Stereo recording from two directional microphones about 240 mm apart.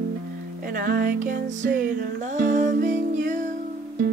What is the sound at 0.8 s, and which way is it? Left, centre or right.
Music, right.